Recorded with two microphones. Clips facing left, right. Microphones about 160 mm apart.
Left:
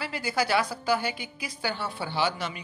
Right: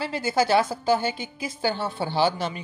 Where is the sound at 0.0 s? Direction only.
25° right (ahead or behind).